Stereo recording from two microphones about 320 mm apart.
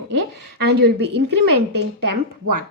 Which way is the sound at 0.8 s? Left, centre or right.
Right.